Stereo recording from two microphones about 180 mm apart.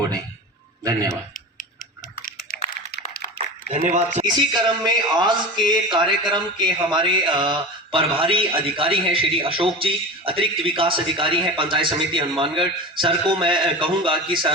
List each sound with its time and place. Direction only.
2.5 s typing: 50° left (ahead or behind)
3.7 s speech: 40° right (ahead or behind)
4.3 s speech: 25° right (ahead or behind)